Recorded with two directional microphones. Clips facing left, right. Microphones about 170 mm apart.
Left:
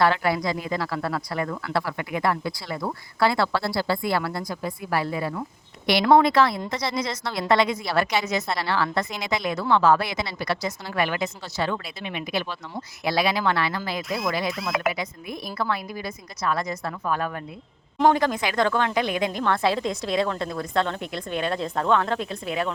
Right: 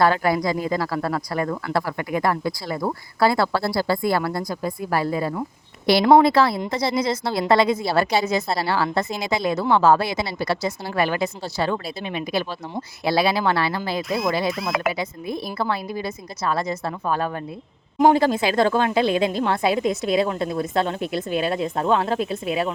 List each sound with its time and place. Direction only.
0.0 s speech: 40° right (ahead or behind); by 22.7 s 25° right (ahead or behind)